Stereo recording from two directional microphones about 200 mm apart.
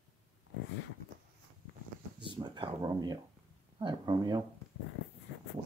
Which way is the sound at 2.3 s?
20° right (ahead or behind).